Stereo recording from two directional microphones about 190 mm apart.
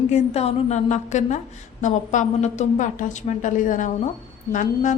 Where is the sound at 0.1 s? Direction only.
35° left (ahead or behind).